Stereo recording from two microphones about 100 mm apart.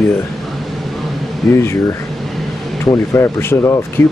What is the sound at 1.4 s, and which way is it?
Speech, 5° left (ahead or behind).